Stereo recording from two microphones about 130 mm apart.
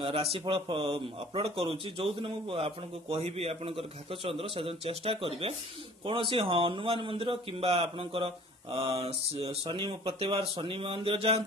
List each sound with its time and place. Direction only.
0.0 s speech: 50° right (ahead or behind)